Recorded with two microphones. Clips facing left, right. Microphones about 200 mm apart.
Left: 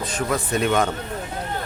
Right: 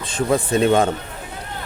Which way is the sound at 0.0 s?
30° right (ahead or behind).